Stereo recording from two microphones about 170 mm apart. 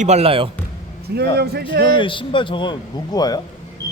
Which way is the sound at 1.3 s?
70° right (ahead or behind).